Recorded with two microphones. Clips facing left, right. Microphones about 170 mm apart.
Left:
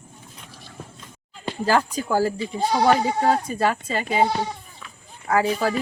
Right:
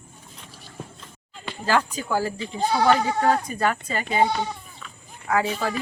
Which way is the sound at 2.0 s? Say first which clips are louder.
Left 4 dB; 40° left (ahead or behind).